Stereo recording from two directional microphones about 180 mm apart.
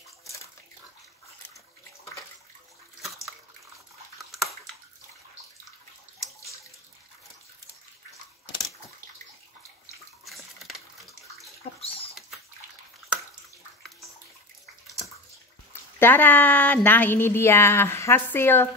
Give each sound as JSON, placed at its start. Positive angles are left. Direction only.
{"t": 4.2, "sound": "bathtub", "side_deg": 0}
{"t": 10.2, "sound": "a sound", "side_deg": 0}
{"t": 11.6, "sound": "bathtub", "side_deg": 35}
{"t": 15.7, "sound": "a woman's voice", "side_deg": 10}